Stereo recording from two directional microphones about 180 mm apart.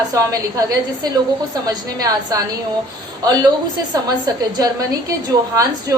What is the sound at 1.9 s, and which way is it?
Speech, 20° right (ahead or behind).